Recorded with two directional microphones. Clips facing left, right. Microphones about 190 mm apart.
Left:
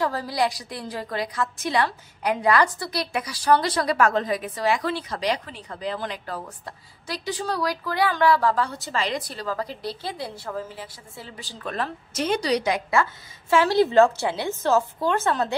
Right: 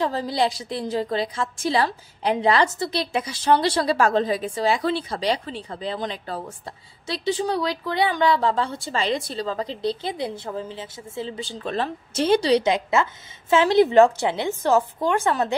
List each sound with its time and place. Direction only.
0.0 s a woman's voice: 25° right (ahead or behind)